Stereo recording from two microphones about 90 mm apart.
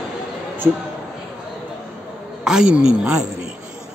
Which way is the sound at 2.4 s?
10° right (ahead or behind).